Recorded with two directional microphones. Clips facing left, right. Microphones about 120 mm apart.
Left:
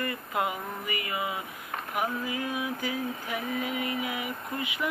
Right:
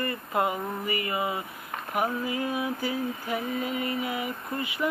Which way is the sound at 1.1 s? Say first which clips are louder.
Right 3 dB; centre (ahead or behind).